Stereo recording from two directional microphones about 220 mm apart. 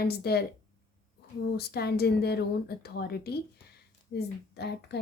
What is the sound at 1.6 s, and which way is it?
A woman's voice, 45° left (ahead or behind).